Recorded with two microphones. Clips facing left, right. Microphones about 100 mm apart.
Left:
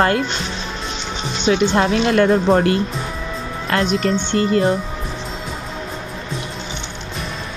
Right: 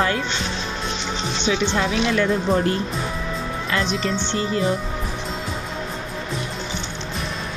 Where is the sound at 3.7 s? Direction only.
60° left (ahead or behind).